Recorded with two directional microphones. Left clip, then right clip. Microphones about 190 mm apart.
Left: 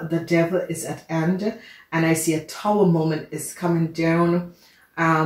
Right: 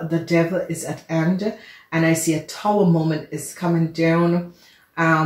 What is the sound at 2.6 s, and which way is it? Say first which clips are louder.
Speech: right 2 dB; 25° right (ahead or behind).